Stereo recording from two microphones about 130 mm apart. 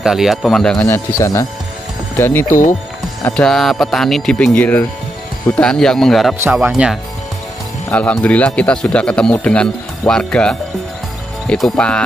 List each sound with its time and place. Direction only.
0.0 s speech: 5° right (ahead or behind)
0.8 s speech: 20° left (ahead or behind)
3.3 s speech: 5° left (ahead or behind)
7.9 s speech: 10° left (ahead or behind)